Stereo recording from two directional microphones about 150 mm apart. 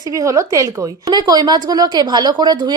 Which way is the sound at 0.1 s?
20° right (ahead or behind).